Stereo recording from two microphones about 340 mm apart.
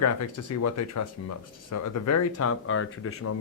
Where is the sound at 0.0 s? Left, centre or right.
Left.